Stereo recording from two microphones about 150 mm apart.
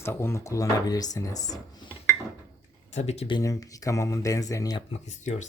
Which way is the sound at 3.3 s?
20° left (ahead or behind).